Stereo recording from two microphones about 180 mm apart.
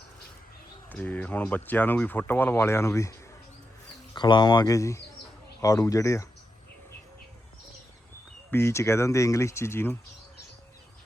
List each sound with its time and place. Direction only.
0.9 s speech: 10° left (ahead or behind)
8.4 s speech: 15° left (ahead or behind)